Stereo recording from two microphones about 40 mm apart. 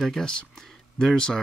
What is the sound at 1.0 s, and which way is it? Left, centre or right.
Speech, centre.